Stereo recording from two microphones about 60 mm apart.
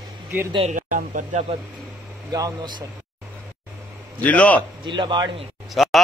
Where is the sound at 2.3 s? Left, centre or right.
Right.